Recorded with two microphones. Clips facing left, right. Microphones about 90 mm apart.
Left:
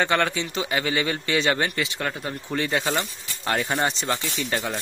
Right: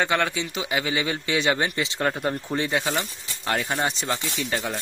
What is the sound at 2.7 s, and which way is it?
Speech, 5° right (ahead or behind).